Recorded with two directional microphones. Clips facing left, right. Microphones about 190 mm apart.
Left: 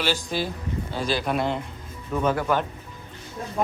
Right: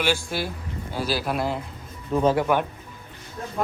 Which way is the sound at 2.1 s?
25° right (ahead or behind).